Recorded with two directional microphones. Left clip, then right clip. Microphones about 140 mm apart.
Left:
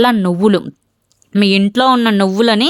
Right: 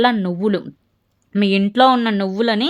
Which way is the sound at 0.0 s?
35° left (ahead or behind).